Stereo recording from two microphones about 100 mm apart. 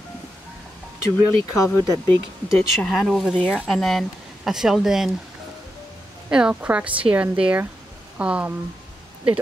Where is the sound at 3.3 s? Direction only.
15° left (ahead or behind); by 5.1 s centre (ahead or behind).